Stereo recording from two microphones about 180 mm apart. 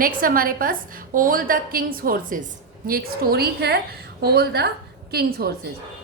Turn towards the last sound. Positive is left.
turn(degrees=-60)  # may be behind; listen again after turning